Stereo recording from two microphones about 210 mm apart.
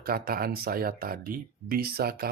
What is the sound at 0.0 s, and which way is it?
Speech, 45° right (ahead or behind).